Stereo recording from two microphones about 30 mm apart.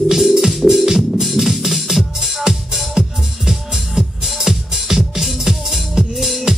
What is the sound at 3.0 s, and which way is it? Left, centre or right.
Music, right.